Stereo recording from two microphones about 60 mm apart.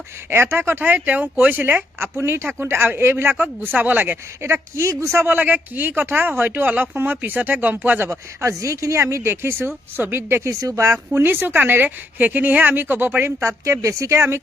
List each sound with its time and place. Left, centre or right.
0.3 s speech: right
4.4 s speech: right
5.2 s speech: right
8.1 s speech: right
10.5 s speech: right
11.1 s speech: right
13.4 s speech: right